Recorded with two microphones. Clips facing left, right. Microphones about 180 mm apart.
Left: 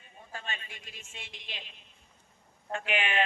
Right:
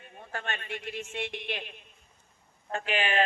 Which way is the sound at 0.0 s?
65° right (ahead or behind).